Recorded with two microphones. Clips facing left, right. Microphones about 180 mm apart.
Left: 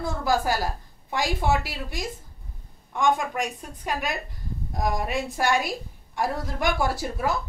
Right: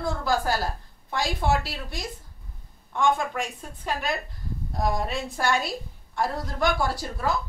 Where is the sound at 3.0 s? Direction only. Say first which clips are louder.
Left 1 dB; 15° left (ahead or behind).